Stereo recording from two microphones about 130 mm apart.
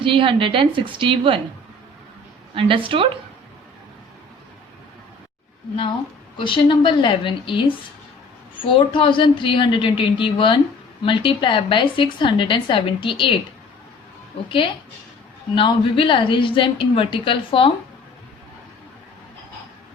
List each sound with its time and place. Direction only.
0.0 s a woman's voice: 40° right (ahead or behind)
2.6 s a woman's voice: 40° right (ahead or behind)
6.3 s a woman's voice: 40° left (ahead or behind)
15.5 s a woman's voice: 40° left (ahead or behind)